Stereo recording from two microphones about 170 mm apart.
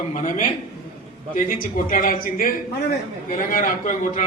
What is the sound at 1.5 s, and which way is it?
A man's voice, 55° left (ahead or behind).